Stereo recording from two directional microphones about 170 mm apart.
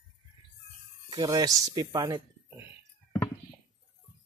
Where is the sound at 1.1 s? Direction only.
25° right (ahead or behind).